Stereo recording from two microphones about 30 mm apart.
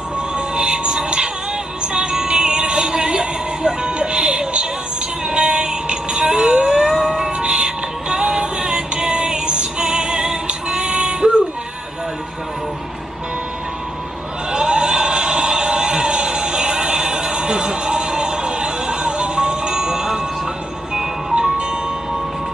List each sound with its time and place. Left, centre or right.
0.6 s music: right
7.3 s music: right
10.7 s female singing: right
14.5 s a sound: right
21.4 s music: right